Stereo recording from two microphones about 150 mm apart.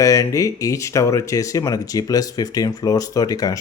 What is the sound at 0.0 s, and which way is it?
A man's voice, 20° left (ahead or behind).